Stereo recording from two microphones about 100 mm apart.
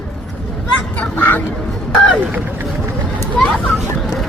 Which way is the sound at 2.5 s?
30° right (ahead or behind).